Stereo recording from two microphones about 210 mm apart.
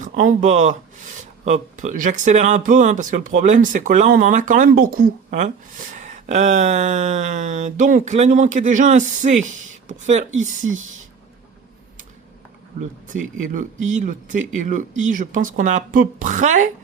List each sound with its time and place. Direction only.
0.0 s speech: 35° right (ahead or behind)
13.1 s speech: 40° right (ahead or behind)